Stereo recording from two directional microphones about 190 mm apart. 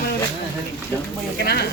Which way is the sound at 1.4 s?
55° left (ahead or behind).